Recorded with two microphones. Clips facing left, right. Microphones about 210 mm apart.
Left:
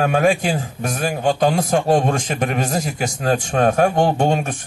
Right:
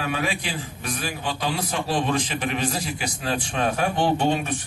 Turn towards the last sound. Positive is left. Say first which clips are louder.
# left 4 dB
turn(degrees=45)  # may be behind; listen again after turning